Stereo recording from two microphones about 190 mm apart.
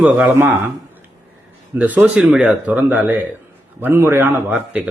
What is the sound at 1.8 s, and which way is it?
Speech, 5° right (ahead or behind).